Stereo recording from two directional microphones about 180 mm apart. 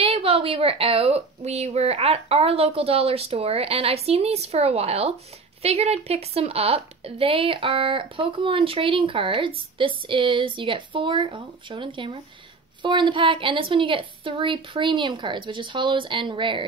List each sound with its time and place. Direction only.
0.0 s a woman's voice: 30° right (ahead or behind)